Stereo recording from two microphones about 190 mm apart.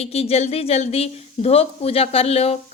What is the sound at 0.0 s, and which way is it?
Speech, 35° left (ahead or behind).